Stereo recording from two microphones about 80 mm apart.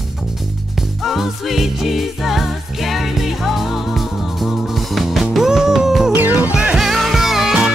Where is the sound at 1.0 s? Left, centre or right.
Centre.